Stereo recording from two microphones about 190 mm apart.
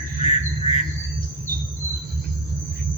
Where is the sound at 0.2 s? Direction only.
35° left (ahead or behind).